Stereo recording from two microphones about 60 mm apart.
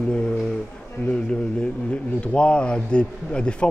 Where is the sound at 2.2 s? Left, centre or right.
Centre.